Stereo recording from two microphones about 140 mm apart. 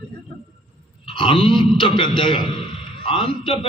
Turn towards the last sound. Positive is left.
turn(degrees=40)  # may be behind; listen again after turning